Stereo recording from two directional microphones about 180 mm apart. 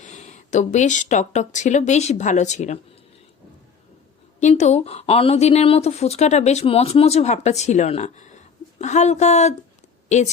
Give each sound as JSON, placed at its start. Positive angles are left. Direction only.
{"t": 0.0, "sound": "speech", "side_deg": 40}
{"t": 4.4, "sound": "a woman's voice", "side_deg": 40}